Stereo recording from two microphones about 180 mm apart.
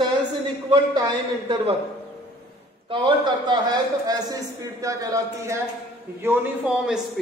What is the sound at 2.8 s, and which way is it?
A man's voice, 25° right (ahead or behind).